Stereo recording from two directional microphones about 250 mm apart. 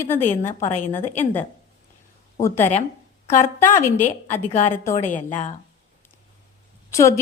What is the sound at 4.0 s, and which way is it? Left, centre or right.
A woman's voice, left.